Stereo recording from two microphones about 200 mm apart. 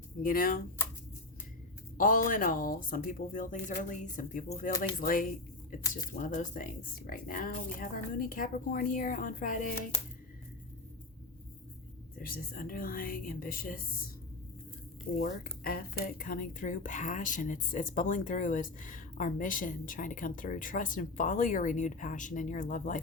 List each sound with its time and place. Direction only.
0.2 s speech: 45° left (ahead or behind)
2.0 s speech: 40° left (ahead or behind)
12.2 s speech: 45° left (ahead or behind)
15.1 s speech: 50° left (ahead or behind)